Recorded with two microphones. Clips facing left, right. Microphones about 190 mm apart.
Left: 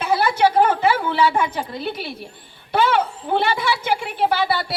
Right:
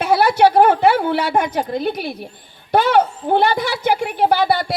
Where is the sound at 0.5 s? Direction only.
65° right (ahead or behind).